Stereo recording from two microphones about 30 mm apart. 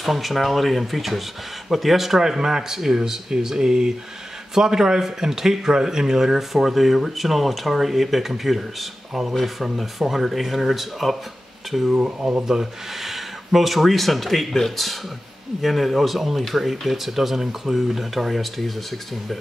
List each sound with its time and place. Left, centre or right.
0.0 s a man's voice: centre
9.3 s speech: centre
12.0 s speech: right
12.4 s a man's voice: centre